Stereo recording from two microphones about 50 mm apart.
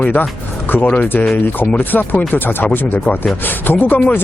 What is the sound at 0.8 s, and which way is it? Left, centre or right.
Speech, left.